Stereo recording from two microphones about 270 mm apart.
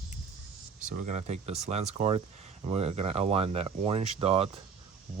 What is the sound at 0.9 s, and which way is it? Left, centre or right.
Speech, right.